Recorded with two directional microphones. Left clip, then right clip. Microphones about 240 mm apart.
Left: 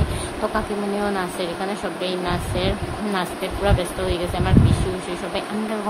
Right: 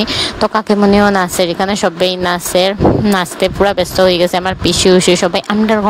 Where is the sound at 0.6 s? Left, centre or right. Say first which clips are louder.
Right 16 dB; right.